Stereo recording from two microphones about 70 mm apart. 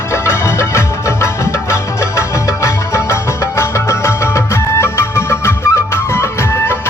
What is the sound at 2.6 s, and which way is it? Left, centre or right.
Music, left.